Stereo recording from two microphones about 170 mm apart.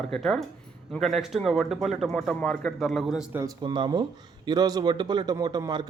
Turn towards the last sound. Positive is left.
turn(degrees=-25)  # may be behind; listen again after turning